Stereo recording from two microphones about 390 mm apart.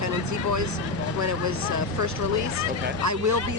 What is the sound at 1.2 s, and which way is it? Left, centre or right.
Speech, right.